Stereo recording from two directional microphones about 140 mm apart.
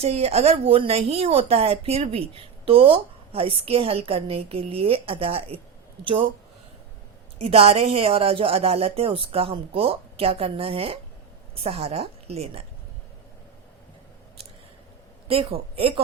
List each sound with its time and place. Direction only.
0.0 s a woman's voice: 50° right (ahead or behind)
7.3 s a woman's voice: 45° right (ahead or behind)
15.3 s a woman's voice: 40° right (ahead or behind)